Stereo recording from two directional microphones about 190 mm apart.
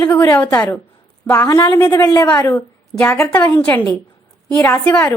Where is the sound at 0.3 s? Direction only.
10° left (ahead or behind).